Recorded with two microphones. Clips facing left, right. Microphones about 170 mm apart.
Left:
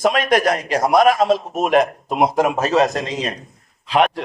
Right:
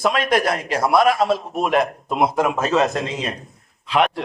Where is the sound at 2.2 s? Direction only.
40° left (ahead or behind).